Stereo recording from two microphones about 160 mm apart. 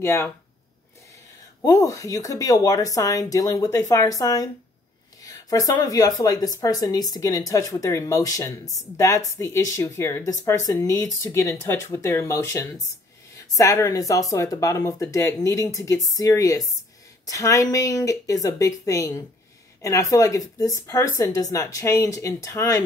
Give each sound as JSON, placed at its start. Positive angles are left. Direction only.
{"t": 0.0, "sound": "speech", "side_deg": 15}
{"t": 1.6, "sound": "speech", "side_deg": 20}